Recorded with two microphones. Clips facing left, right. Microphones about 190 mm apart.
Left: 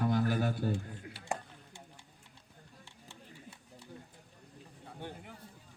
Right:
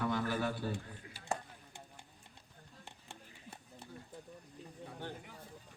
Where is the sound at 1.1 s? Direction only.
70° left (ahead or behind).